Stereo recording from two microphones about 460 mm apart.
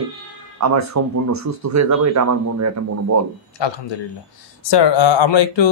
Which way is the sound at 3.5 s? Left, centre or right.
Left.